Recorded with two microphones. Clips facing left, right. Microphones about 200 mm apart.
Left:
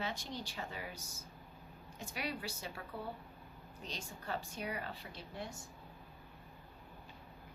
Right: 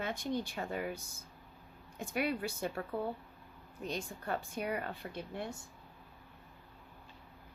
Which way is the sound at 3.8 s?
55° right (ahead or behind).